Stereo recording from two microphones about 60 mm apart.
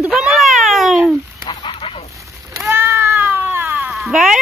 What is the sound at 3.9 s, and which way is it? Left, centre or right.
Cat, centre.